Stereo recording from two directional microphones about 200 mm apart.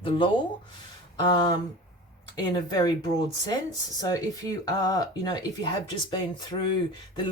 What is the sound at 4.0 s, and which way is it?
Speech, 20° left (ahead or behind).